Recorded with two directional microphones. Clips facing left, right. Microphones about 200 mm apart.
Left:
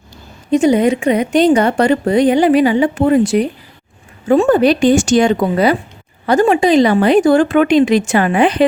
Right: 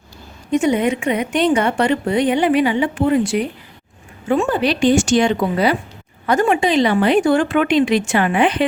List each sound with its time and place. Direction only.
0.5 s a woman's voice: 35° left (ahead or behind)
6.2 s a woman's voice: 35° left (ahead or behind)